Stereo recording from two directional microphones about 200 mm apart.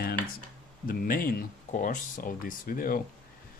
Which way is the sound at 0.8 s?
50° left (ahead or behind).